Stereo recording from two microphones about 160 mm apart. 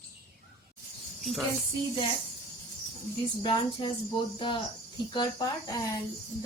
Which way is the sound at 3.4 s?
30° left (ahead or behind).